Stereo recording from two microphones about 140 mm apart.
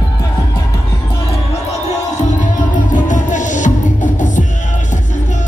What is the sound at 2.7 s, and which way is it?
Music, 65° left (ahead or behind).